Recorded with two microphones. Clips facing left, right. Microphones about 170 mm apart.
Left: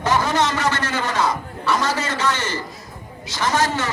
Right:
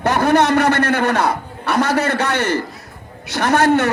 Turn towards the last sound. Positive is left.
turn(degrees=-60)  # may be behind; listen again after turning